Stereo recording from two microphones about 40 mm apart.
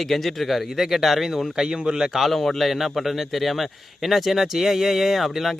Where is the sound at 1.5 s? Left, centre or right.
Centre.